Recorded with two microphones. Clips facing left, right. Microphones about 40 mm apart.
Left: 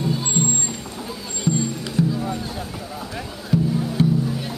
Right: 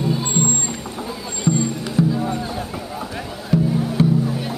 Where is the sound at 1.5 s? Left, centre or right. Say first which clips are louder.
Right 3 dB; right.